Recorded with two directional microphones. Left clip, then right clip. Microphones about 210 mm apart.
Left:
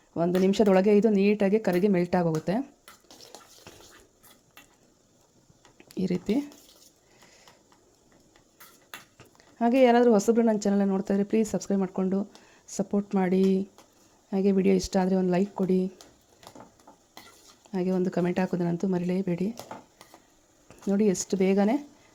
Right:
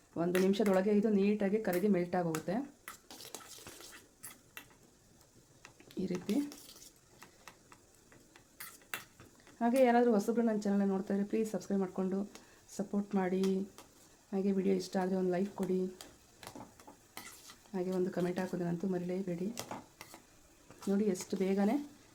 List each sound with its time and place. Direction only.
0.4 s speech: 30° left (ahead or behind)
3.7 s fill: 20° left (ahead or behind)
6.0 s speech: 35° left (ahead or behind)
9.1 s speech: 35° left (ahead or behind)
17.7 s speech: 35° left (ahead or behind)
20.7 s speech: 35° left (ahead or behind)